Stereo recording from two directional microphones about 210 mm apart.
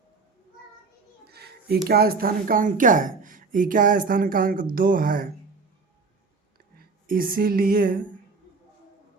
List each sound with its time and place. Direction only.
1.3 s a woman's voice: 50° right (ahead or behind)
6.7 s speech: 45° right (ahead or behind)